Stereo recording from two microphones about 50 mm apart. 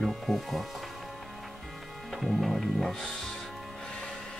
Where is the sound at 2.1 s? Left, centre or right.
Centre.